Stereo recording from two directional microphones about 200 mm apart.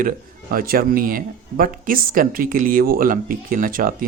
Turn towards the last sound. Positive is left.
turn(degrees=-45)  # may be behind; listen again after turning